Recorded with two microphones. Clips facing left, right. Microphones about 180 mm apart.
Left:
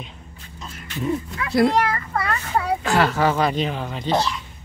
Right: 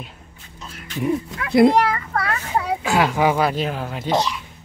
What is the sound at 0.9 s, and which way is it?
Speech, 20° right (ahead or behind).